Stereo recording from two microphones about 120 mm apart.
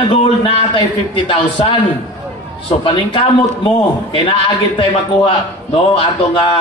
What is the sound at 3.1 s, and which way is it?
A man's voice, 45° left (ahead or behind).